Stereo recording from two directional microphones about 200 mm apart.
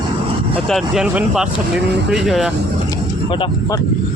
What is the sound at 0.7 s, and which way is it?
Speech, centre (ahead or behind).